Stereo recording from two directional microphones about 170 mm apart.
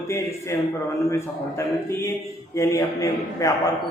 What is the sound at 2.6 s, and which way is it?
A man's voice, 20° left (ahead or behind).